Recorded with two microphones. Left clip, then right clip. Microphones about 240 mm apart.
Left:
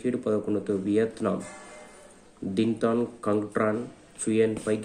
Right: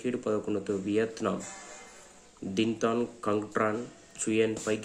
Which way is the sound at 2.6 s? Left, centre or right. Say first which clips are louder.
Left 3 dB; centre.